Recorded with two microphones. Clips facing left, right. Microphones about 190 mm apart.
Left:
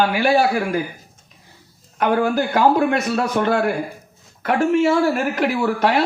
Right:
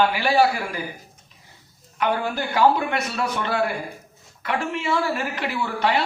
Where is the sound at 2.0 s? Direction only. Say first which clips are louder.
Left 6 dB; 45° left (ahead or behind).